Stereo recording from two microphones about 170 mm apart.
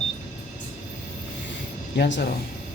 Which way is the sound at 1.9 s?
90° left.